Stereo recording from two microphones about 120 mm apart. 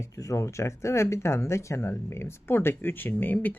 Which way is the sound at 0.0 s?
25° left (ahead or behind).